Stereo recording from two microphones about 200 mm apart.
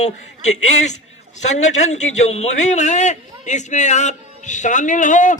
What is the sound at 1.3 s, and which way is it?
A man's voice, 35° left (ahead or behind).